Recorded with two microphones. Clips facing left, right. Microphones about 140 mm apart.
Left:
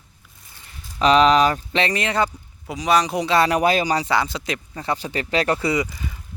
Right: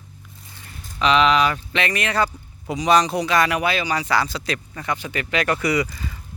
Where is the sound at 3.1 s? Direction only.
30° left (ahead or behind).